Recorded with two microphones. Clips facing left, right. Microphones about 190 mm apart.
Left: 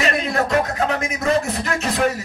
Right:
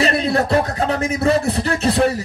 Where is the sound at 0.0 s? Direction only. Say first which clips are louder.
Right 3 dB; 35° right (ahead or behind).